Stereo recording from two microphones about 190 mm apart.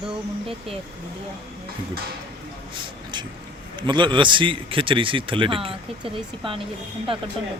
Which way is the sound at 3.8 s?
25° right (ahead or behind).